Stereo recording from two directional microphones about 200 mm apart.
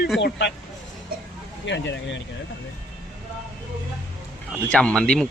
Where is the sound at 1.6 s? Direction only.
65° left (ahead or behind).